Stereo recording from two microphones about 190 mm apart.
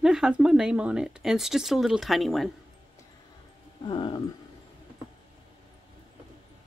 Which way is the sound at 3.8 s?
25° left (ahead or behind).